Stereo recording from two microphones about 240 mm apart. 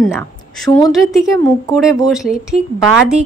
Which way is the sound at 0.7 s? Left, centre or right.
Centre.